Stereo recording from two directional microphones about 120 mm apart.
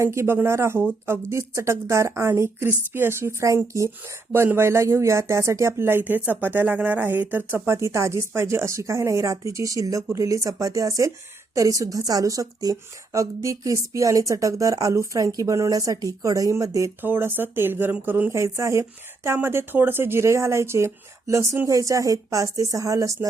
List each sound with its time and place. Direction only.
0.0 s speech: 20° right (ahead or behind)